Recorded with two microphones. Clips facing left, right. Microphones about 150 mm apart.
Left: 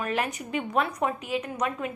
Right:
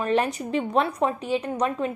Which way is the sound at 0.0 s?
30° right (ahead or behind).